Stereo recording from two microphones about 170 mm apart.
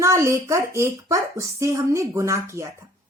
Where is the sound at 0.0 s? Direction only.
15° right (ahead or behind).